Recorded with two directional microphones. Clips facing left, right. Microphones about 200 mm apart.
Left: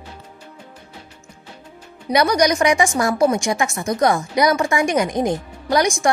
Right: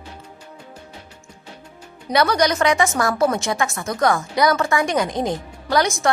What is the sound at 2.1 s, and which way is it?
A woman's voice, 15° left (ahead or behind).